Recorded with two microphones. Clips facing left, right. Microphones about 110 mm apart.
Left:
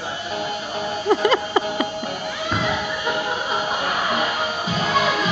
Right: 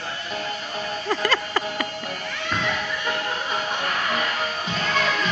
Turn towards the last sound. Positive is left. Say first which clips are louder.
# left 4 dB
turn(degrees=10)  # may be behind; listen again after turning